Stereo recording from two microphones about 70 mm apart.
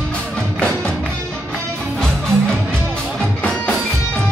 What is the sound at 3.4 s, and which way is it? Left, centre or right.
Music, centre.